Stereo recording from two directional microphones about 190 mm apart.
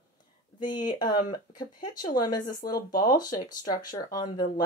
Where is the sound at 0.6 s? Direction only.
20° left (ahead or behind).